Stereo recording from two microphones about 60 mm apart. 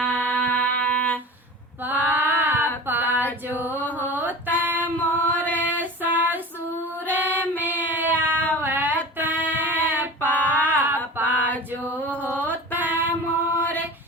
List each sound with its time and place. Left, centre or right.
0.0 s music: left
1.8 s female singing: right
2.8 s a sound: right
4.5 s female singing: right
4.9 s female singing: left
5.8 s child singing: right
7.0 s female singing: right
7.9 s child singing: right
9.1 s a sound: right
11.7 s chant: right
12.2 s mantra: right
13.2 s mantra: left